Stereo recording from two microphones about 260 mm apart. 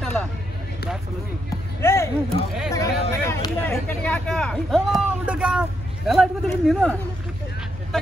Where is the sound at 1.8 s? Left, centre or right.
Centre.